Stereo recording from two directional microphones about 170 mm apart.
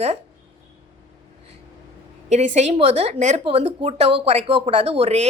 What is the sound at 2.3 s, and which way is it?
Speech, 40° right (ahead or behind).